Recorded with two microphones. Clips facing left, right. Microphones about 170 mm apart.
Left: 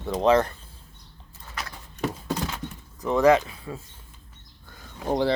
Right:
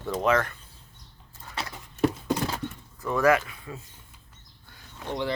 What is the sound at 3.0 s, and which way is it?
Speech, 20° left (ahead or behind).